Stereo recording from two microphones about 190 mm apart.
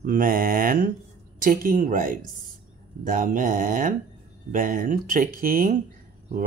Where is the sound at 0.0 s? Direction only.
45° right (ahead or behind).